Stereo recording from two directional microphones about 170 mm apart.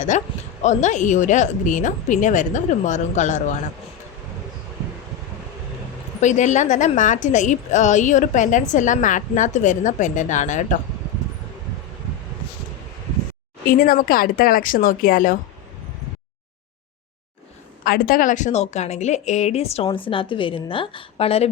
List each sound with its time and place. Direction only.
0.1 s speech: 45° left (ahead or behind)
6.1 s speech: 45° left (ahead or behind)
13.7 s speech: 60° left (ahead or behind)
17.8 s a woman's voice: 60° left (ahead or behind); by 21.5 s 35° left (ahead or behind)